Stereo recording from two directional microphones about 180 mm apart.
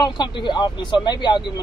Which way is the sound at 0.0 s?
25° left (ahead or behind).